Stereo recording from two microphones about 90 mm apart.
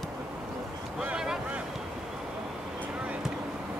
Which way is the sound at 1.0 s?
10° right (ahead or behind).